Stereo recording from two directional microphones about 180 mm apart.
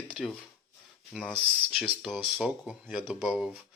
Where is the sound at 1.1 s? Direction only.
Centre (ahead or behind).